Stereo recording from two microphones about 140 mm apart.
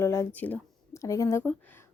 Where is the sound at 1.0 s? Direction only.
20° left (ahead or behind).